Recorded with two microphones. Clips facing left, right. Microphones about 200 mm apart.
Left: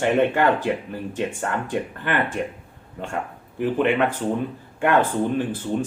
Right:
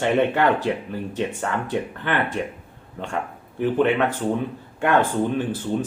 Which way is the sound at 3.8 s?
10° left (ahead or behind).